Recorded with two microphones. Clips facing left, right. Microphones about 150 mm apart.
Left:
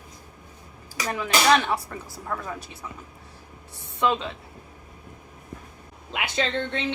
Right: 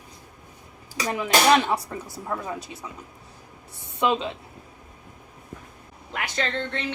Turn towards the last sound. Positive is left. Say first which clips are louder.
# left 2 dB
turn(degrees=15)  # may be behind; listen again after turning